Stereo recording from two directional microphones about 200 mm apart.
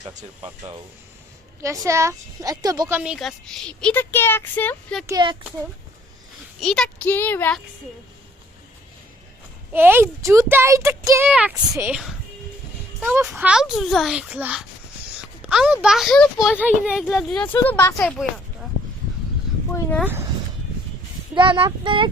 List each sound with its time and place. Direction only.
1.6 s speech: 15° right (ahead or behind)
3.0 s a woman's voice: centre (ahead or behind)
5.0 s child singing: 20° right (ahead or behind)
6.6 s speech: centre (ahead or behind)
9.7 s a woman's voice: 10° right (ahead or behind); by 18.1 s 10° left (ahead or behind)
20.0 s speech: 10° right (ahead or behind)
21.3 s child singing: 25° right (ahead or behind)